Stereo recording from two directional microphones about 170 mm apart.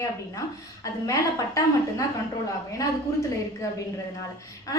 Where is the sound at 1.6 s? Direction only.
20° left (ahead or behind).